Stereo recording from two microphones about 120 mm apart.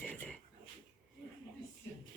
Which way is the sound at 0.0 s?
15° left (ahead or behind).